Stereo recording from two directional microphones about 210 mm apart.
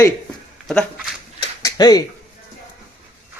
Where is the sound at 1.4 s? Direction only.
20° left (ahead or behind).